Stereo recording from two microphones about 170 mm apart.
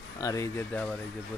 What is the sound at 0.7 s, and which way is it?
Speech, 5° left (ahead or behind).